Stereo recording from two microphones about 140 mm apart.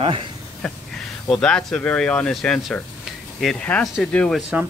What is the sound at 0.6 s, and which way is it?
Speech, 5° left (ahead or behind).